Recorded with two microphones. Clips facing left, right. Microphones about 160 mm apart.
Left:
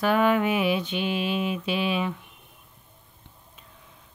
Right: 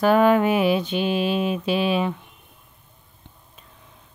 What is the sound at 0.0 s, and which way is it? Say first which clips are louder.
Music: right 5 dB; 40° right (ahead or behind).